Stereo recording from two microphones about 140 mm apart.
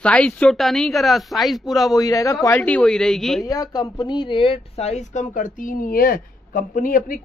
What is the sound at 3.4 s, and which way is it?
Speech, 25° left (ahead or behind).